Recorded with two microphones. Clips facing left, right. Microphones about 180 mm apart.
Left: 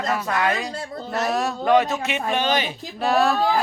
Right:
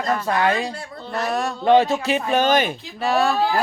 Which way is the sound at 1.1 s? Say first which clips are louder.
Even; centre (ahead or behind).